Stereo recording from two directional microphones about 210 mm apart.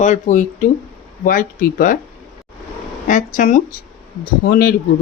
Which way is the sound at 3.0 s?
35° left (ahead or behind).